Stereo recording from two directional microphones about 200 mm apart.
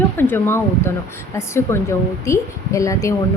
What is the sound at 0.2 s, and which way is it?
Speech, 10° left (ahead or behind).